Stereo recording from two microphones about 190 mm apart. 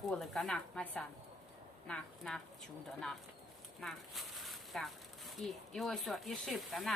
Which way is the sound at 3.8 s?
Centre (ahead or behind).